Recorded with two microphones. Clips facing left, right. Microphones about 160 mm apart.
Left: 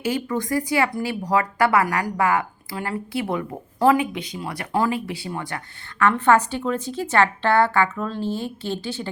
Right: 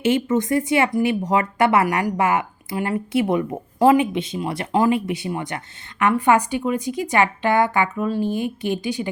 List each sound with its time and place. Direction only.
0.0 s a woman's voice: 20° right (ahead or behind)